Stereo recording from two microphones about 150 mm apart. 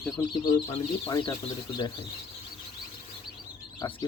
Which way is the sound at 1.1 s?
25° left (ahead or behind).